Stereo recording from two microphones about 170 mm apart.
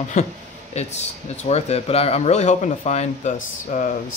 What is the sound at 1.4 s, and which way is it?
Speech, 40° left (ahead or behind).